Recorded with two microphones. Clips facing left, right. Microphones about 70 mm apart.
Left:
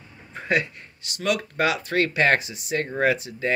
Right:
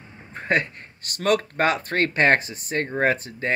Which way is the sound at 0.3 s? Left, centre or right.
Right.